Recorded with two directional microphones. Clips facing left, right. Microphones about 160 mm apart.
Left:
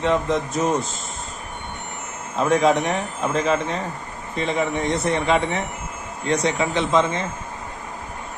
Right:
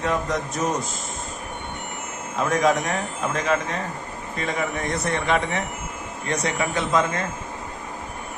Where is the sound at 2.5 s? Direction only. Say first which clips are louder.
Left 3 dB; 30° left (ahead or behind).